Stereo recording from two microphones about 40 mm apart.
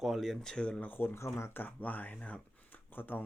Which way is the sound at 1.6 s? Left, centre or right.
Left.